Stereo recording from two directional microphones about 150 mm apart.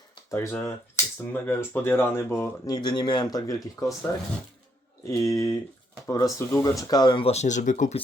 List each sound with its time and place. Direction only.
0.3 s speech: 15° left (ahead or behind); by 7.9 s 60° left (ahead or behind)